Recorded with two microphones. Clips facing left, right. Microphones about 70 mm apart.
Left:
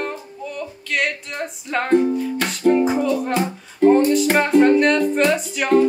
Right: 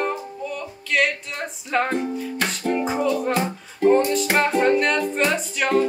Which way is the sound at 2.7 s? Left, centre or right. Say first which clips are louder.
Left 6 dB; centre.